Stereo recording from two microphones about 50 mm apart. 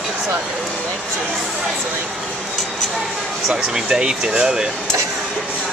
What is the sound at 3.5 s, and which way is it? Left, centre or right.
Speech, centre.